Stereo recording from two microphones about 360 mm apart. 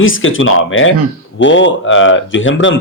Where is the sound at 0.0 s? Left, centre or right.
Left.